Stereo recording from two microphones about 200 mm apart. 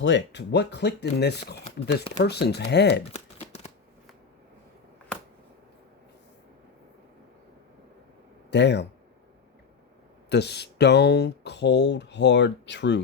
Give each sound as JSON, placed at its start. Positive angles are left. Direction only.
{"t": 0.0, "sound": "speech", "side_deg": 60}
{"t": 8.4, "sound": "speech", "side_deg": 60}
{"t": 10.2, "sound": "speech", "side_deg": 55}